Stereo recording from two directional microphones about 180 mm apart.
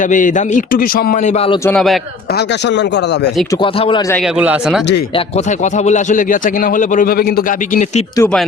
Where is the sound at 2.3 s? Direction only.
65° left (ahead or behind).